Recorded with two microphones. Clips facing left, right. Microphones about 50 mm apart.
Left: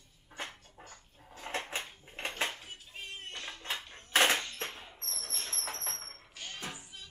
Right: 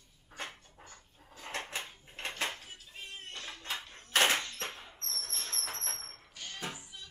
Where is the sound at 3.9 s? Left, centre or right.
Left.